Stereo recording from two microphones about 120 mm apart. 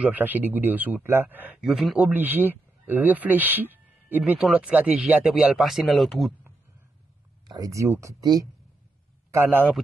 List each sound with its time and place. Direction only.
0.0 s a man's voice: 15° right (ahead or behind)
1.6 s speech: 5° right (ahead or behind)
7.4 s speech: 30° right (ahead or behind)
9.3 s a man's voice: 20° right (ahead or behind)